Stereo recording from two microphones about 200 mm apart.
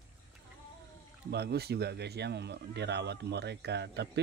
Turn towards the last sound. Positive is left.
turn(degrees=-55)  # may be behind; listen again after turning